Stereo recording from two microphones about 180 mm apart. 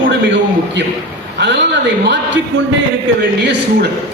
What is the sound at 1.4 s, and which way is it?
Speech, 80° right.